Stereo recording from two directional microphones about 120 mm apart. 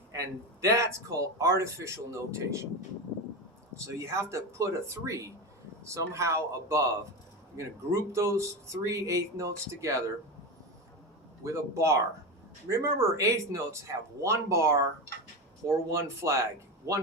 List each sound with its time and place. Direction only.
0.1 s a man's voice: 25° right (ahead or behind)
3.8 s a man's voice: 25° right (ahead or behind)
11.4 s a man's voice: 25° right (ahead or behind)